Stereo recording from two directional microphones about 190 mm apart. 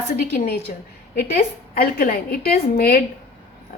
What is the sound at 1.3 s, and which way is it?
A woman's voice, 50° left (ahead or behind).